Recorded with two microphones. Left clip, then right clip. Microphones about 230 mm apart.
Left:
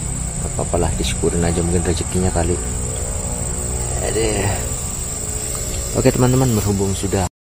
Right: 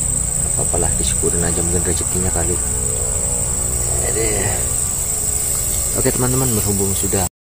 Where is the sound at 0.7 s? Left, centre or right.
Left.